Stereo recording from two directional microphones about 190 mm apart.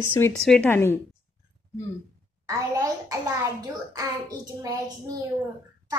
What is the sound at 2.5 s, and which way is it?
A woman's voice, 15° right (ahead or behind).